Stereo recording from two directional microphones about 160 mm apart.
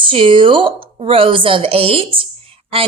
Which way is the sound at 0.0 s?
35° right (ahead or behind).